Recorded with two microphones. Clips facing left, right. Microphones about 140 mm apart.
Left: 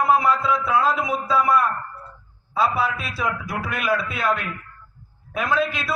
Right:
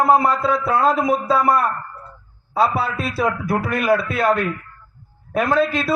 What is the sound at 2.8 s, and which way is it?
A man's voice, 30° right (ahead or behind).